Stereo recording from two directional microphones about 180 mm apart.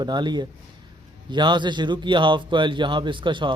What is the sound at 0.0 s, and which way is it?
A man's voice, 25° right (ahead or behind).